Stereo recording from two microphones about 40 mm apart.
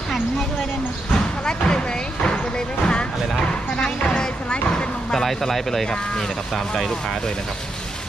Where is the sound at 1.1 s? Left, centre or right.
Left.